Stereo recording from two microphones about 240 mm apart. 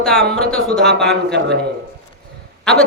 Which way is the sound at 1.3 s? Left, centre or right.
Right.